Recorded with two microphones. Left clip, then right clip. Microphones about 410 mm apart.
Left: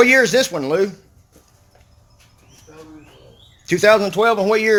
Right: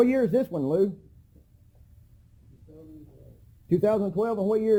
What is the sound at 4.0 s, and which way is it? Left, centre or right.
Speech, centre.